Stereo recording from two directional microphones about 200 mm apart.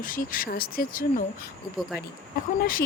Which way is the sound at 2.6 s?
45° left (ahead or behind).